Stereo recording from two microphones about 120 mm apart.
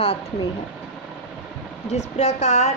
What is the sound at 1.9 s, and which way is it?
Speech, 65° left (ahead or behind).